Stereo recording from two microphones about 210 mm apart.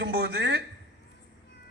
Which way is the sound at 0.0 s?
50° right (ahead or behind).